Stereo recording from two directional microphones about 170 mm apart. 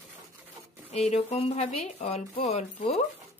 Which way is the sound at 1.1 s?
40° left (ahead or behind).